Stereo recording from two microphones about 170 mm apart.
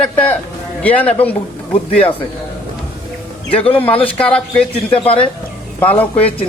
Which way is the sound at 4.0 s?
5° left (ahead or behind).